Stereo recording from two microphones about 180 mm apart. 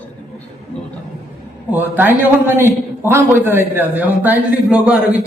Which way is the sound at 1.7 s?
10° right (ahead or behind).